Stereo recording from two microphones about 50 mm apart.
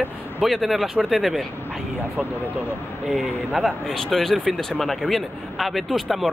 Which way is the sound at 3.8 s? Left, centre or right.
Centre.